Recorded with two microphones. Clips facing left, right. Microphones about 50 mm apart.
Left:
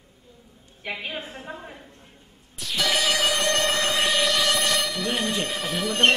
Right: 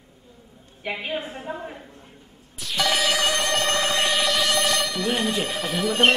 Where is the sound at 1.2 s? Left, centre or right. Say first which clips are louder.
Right 4 dB; right.